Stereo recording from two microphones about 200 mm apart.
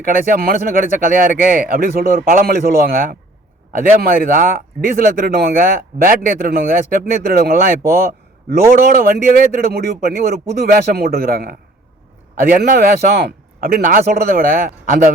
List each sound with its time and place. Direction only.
0.0 s speech: 45° right (ahead or behind)
8.9 s speech: 45° right (ahead or behind)